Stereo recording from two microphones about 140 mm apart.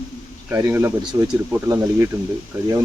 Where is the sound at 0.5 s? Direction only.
20° right (ahead or behind).